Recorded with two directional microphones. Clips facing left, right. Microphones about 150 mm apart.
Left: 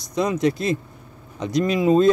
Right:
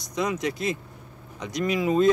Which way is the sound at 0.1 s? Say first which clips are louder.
Left 6 dB; 30° left (ahead or behind).